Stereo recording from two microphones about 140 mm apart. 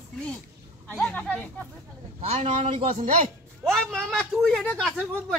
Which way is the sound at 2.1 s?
50° right (ahead or behind).